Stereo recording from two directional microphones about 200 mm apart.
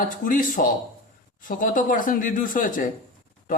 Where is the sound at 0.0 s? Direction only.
40° left (ahead or behind).